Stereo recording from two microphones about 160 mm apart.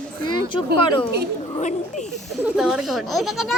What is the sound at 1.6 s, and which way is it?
Speech, 50° left (ahead or behind).